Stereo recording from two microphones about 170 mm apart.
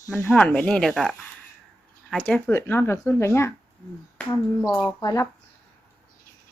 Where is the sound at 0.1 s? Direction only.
5° left (ahead or behind).